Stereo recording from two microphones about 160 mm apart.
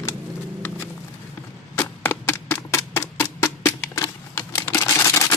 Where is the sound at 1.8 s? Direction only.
10° left (ahead or behind).